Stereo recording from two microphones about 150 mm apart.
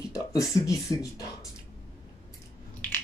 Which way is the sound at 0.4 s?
20° left (ahead or behind).